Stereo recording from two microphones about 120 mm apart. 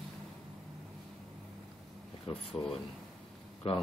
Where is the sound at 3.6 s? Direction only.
55° left (ahead or behind).